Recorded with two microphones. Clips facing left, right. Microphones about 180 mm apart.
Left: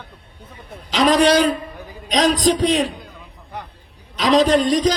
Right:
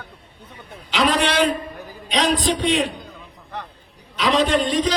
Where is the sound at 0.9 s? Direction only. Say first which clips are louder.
Left 6 dB; 40° left (ahead or behind).